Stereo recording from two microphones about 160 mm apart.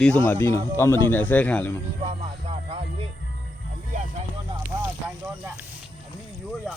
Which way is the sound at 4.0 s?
45° right (ahead or behind).